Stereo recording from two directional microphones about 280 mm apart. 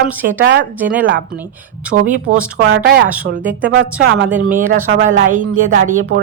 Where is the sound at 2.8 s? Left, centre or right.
Right.